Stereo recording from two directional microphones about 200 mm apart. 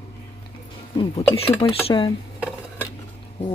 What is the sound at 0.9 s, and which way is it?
Speech, 30° left (ahead or behind).